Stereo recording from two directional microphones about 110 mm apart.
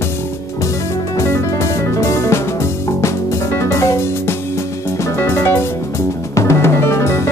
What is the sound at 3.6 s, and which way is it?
Music, 25° left (ahead or behind).